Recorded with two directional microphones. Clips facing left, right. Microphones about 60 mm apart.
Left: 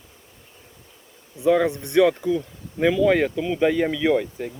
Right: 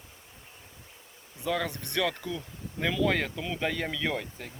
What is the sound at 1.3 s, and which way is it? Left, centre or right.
Speech, left.